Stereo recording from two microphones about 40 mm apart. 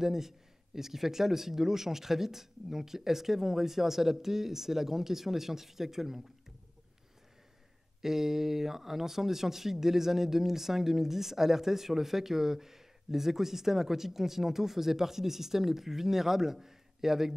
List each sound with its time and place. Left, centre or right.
0.0 s speech: centre
8.0 s speech: centre